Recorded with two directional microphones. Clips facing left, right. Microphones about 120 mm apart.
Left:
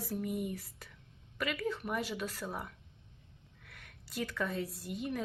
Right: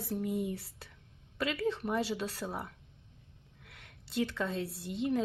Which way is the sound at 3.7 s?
20° right (ahead or behind).